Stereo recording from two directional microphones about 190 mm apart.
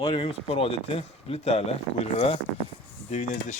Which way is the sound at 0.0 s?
30° left (ahead or behind).